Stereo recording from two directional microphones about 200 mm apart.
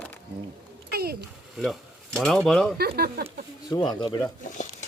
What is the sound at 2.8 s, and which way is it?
Speech, 50° right (ahead or behind).